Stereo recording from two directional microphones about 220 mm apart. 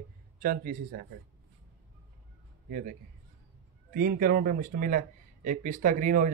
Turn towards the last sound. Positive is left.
turn(degrees=-35)  # may be behind; listen again after turning